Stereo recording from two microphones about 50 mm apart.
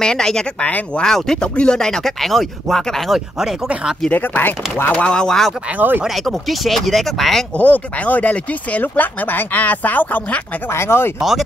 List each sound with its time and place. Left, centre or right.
0.0 s speech: centre
0.6 s speech: left
1.0 s speech: centre
4.1 s speech: left
4.9 s speech: centre
5.8 s speech: right
6.2 s speech: centre
7.5 s speech: left
10.7 s speech: left
11.1 s speech: centre